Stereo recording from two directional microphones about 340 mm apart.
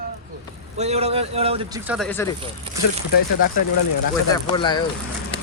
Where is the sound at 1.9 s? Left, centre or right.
Centre.